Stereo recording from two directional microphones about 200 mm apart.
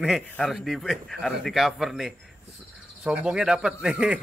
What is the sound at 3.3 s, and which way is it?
Speech, 5° right (ahead or behind).